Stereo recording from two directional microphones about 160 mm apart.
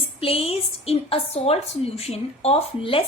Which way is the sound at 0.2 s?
35° left (ahead or behind).